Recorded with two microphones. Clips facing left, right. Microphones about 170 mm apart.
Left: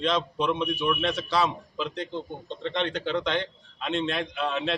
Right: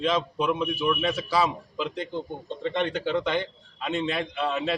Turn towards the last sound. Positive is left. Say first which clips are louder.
# right 1 dB
turn(degrees=-5)  # may be behind; listen again after turning